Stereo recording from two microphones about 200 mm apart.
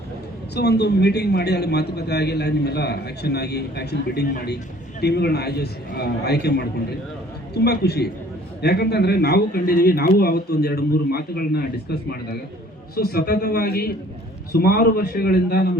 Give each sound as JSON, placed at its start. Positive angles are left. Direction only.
{"t": 0.5, "sound": "a man's voice", "side_deg": 55}